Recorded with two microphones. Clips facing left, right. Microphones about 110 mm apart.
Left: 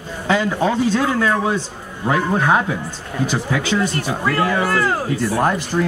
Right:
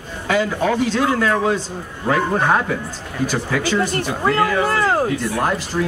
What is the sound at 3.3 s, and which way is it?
Speech, 20° left (ahead or behind).